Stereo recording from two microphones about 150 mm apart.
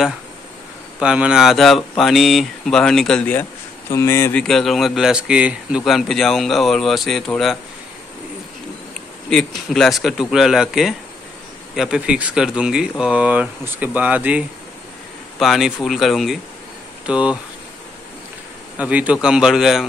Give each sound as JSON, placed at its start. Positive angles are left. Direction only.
{"t": 0.9, "sound": "a man's voice", "side_deg": -5}
{"t": 3.9, "sound": "speech", "side_deg": 20}
{"t": 4.4, "sound": "a man's voice", "side_deg": 0}
{"t": 9.3, "sound": "a man's voice", "side_deg": 5}
{"t": 18.8, "sound": "a man's voice", "side_deg": -10}